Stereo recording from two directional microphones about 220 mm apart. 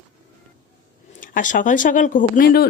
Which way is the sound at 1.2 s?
40° left (ahead or behind).